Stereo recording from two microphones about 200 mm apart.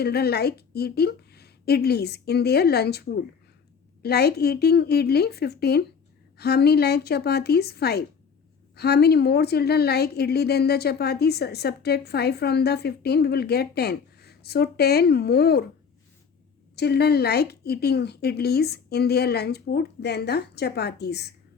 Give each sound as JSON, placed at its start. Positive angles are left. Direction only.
{"t": 0.0, "sound": "a woman's voice", "side_deg": 55}
{"t": 16.7, "sound": "a woman's voice", "side_deg": 55}